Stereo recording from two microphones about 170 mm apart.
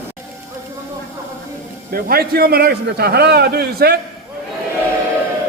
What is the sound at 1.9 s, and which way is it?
A man's voice, 60° right (ahead or behind).